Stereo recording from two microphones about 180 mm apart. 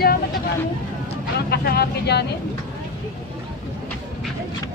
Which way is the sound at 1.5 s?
60° left (ahead or behind).